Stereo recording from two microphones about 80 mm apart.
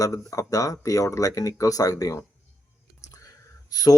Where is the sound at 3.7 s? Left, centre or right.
Left.